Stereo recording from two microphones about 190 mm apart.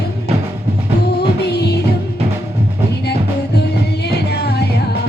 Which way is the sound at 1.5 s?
60° left (ahead or behind).